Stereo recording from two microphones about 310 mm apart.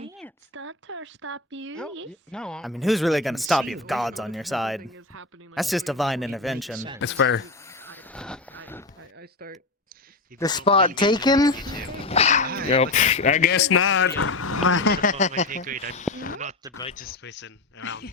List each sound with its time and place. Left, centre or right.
0.5 s speech: right
2.3 s speech: centre
7.0 s speech: left
7.4 s a sound: centre
9.1 s speech: right
10.3 s speech: centre; by 13.7 s left
13.7 s speech: left
15.4 s speech: right
15.9 s speech: left